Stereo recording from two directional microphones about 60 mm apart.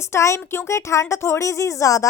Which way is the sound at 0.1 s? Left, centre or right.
Left.